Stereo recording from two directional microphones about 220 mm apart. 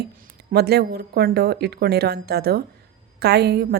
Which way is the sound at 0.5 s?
45° right (ahead or behind).